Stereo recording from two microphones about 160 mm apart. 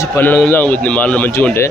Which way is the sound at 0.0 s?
15° left (ahead or behind).